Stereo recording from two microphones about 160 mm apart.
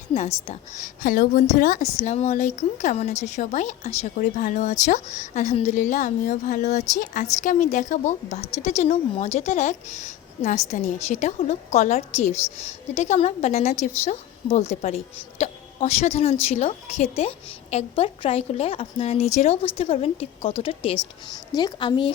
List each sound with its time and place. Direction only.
0.8 s a woman's voice: 65° left (ahead or behind)
2.0 s a woman's voice: 45° left (ahead or behind)